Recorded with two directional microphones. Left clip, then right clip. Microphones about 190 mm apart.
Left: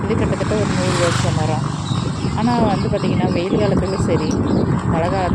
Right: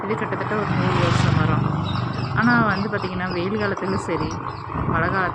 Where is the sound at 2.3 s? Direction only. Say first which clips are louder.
Even; 30° right (ahead or behind).